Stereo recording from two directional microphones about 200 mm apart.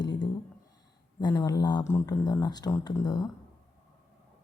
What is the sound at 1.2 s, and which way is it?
Speech, 20° left (ahead or behind).